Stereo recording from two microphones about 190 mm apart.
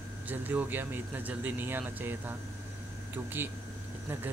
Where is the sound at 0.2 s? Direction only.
10° right (ahead or behind).